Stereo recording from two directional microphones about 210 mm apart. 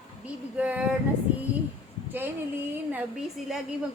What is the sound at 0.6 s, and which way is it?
Speech, 5° right (ahead or behind).